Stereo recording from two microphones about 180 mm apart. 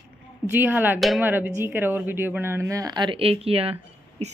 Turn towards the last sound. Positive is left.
turn(degrees=-35)  # may be behind; listen again after turning